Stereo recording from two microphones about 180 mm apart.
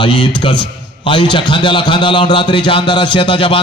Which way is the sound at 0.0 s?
25° left (ahead or behind).